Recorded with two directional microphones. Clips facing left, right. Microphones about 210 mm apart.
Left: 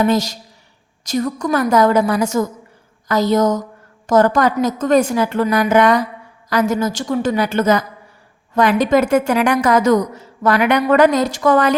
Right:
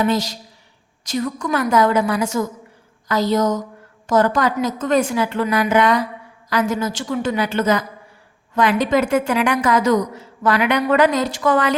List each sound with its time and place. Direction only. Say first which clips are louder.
0.0 s a woman's voice: left 3 dB; 45° left (ahead or behind)